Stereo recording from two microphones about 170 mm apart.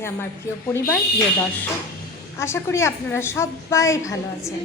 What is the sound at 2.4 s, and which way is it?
A woman's voice, 15° left (ahead or behind).